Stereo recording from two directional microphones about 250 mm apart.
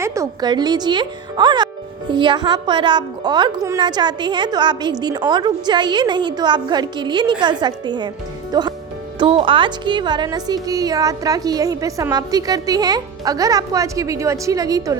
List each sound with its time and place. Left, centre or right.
0.0 s speech: centre